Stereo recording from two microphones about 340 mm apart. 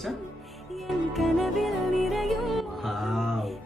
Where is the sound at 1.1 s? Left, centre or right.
Centre.